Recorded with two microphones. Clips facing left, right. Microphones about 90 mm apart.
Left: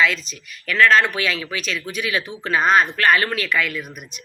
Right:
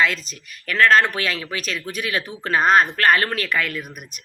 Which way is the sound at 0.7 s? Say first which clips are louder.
Even; 40° right (ahead or behind).